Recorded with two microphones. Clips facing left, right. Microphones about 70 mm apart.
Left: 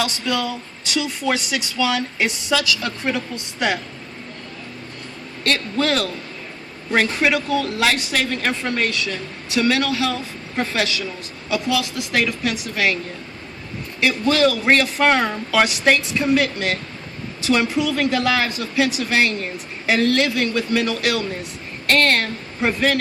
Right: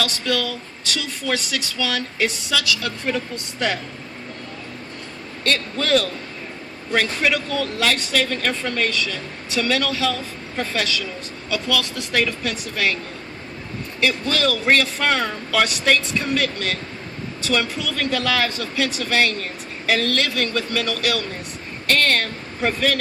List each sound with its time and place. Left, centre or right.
0.0 s speech: centre
5.5 s a man's voice: centre
14.0 s a man's voice: centre